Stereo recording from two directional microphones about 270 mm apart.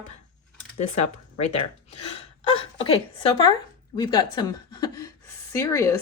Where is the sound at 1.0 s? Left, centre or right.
Left.